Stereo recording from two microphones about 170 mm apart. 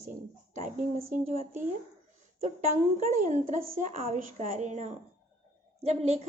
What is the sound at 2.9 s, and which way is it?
A woman's voice, 45° right (ahead or behind).